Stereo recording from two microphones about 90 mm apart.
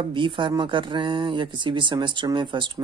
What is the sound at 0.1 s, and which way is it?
Speech, 65° right (ahead or behind).